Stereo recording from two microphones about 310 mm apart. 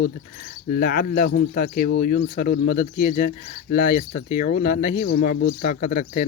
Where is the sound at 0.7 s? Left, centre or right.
Left.